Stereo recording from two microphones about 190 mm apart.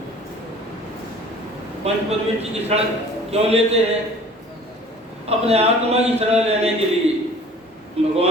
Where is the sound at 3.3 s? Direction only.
35° right (ahead or behind).